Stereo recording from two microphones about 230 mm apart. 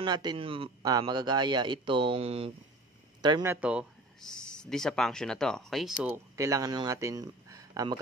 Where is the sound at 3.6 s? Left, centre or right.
Centre.